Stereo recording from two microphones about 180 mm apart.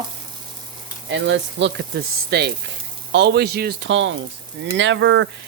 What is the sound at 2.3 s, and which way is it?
Speech, 60° right (ahead or behind).